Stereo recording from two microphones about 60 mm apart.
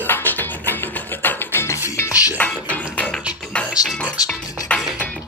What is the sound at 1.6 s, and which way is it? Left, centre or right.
Music, left.